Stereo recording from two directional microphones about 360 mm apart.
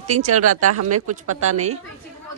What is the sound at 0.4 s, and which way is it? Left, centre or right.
Speech, right.